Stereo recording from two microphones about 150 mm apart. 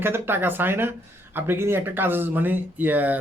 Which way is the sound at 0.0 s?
15° right (ahead or behind).